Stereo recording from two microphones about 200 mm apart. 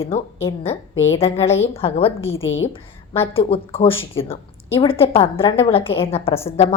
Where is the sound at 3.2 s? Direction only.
25° left (ahead or behind).